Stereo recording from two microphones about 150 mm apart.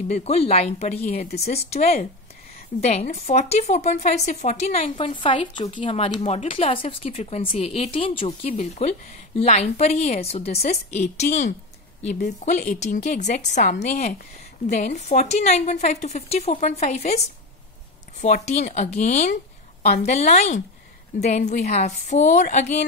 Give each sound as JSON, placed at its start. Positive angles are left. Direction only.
{"t": 0.1, "sound": "a woman's voice", "side_deg": 45}
{"t": 3.1, "sound": "a woman's voice", "side_deg": 50}
{"t": 5.1, "sound": "a woman's voice", "side_deg": 35}
{"t": 18.2, "sound": "a woman's voice", "side_deg": 50}